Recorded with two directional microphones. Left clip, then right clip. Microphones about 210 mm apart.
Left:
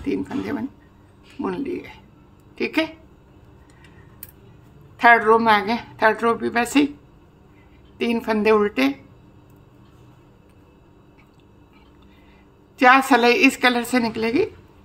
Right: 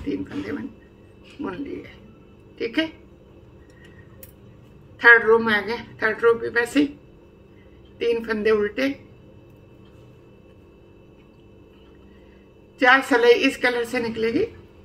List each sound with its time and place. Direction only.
0.0 s a woman's voice: 40° left (ahead or behind)
2.5 s a woman's voice: 40° left (ahead or behind)
4.9 s a woman's voice: 40° left (ahead or behind)
8.0 s a woman's voice: 40° left (ahead or behind)
12.7 s a woman's voice: 40° left (ahead or behind)